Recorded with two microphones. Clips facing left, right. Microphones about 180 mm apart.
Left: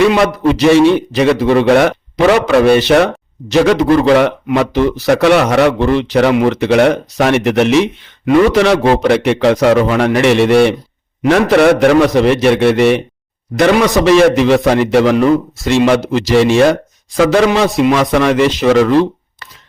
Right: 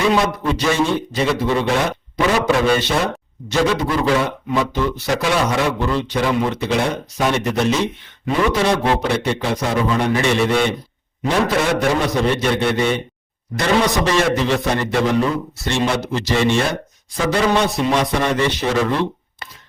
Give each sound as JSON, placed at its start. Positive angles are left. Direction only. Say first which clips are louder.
{"t": 0.0, "sound": "a man's voice", "louder": "left 7 dB", "side_deg": 90}